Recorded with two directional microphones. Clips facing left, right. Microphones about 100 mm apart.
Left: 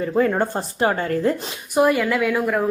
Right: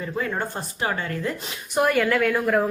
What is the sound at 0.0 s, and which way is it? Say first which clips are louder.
Speech: left 8 dB; 45° left (ahead or behind).